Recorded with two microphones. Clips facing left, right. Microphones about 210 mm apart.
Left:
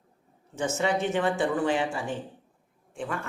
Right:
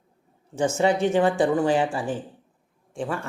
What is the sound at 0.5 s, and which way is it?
Speech, 30° right (ahead or behind).